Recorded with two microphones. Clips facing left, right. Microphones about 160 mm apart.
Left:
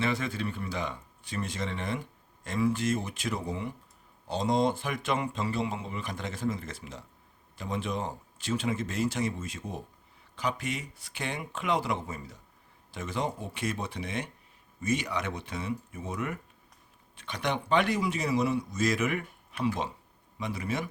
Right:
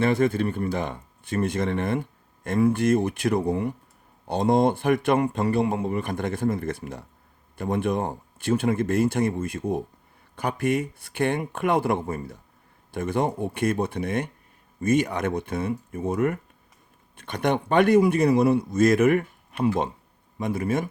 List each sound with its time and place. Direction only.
0.0 s speech: 50° right (ahead or behind)